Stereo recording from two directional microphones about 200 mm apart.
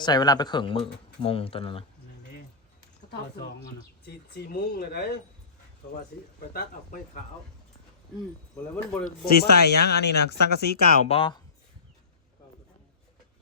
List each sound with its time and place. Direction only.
0.0 s speech: 20° left (ahead or behind)
4.0 s speech: 55° left (ahead or behind)
6.5 s speech: 50° left (ahead or behind)
8.7 s speech: 5° left (ahead or behind)
9.0 s speech: 55° left (ahead or behind)
11.1 s speech: 25° left (ahead or behind)